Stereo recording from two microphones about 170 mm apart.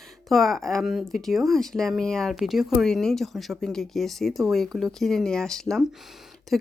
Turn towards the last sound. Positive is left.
turn(degrees=0)  # may be behind; listen again after turning